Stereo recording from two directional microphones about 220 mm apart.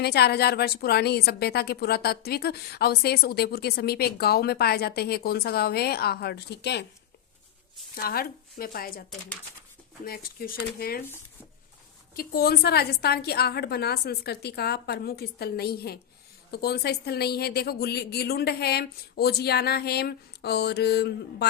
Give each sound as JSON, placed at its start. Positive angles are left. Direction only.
{"t": 0.0, "sound": "a woman's voice", "side_deg": 45}
{"t": 8.0, "sound": "a woman's voice", "side_deg": 45}
{"t": 10.1, "sound": "a woman's voice", "side_deg": 40}
{"t": 12.1, "sound": "a woman's voice", "side_deg": 45}